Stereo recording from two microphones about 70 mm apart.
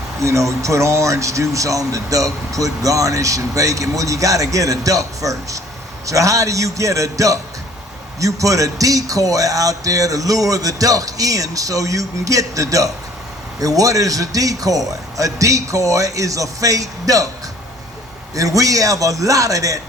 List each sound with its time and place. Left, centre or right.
0.2 s speech: right
18.3 s speech: right